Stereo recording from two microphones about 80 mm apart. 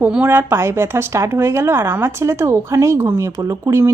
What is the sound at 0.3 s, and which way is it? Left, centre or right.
Speech, right.